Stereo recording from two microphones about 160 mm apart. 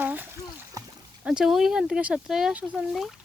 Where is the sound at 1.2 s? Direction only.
5° right (ahead or behind).